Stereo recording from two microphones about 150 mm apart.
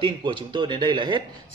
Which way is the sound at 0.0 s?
30° right (ahead or behind).